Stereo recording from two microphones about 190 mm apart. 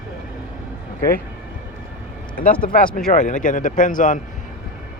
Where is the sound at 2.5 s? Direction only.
5° left (ahead or behind).